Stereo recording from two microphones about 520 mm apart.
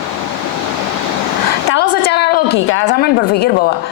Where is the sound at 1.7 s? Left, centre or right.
Centre.